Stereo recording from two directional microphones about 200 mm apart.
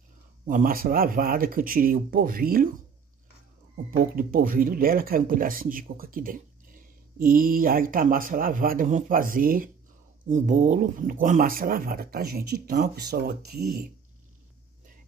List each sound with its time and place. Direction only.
0.5 s speech: 45° right (ahead or behind)
3.7 s speech: 45° right (ahead or behind)